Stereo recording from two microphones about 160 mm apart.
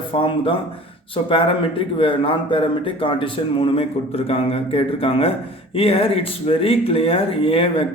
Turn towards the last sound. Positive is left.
turn(degrees=35)  # may be behind; listen again after turning